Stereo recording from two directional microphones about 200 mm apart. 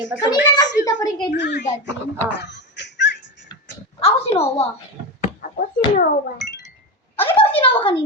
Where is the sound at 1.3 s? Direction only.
60° left (ahead or behind).